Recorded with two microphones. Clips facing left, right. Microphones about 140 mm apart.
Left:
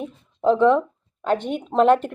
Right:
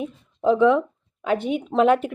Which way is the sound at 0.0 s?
5° right (ahead or behind).